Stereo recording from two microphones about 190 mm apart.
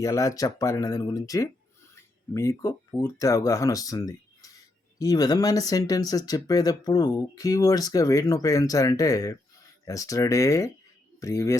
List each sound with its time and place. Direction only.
0.0 s speech: 15° left (ahead or behind)